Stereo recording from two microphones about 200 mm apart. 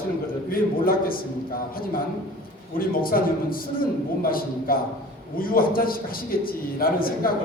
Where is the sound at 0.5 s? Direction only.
45° left (ahead or behind).